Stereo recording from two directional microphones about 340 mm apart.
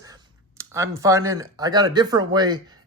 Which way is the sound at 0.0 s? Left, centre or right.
Centre.